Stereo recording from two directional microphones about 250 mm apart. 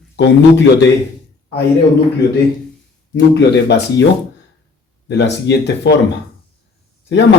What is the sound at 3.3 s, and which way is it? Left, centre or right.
Speech, left.